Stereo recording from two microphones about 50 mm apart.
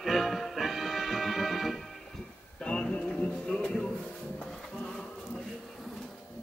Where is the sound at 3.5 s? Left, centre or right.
Centre.